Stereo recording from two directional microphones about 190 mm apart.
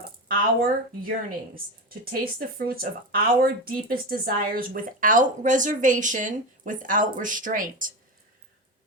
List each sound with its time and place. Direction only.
0.3 s a woman's voice: 50° right (ahead or behind)